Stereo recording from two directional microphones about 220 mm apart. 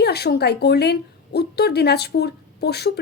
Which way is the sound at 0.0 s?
45° left (ahead or behind).